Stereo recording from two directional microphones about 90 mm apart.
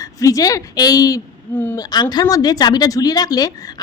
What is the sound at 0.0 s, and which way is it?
A woman's voice, 40° left (ahead or behind).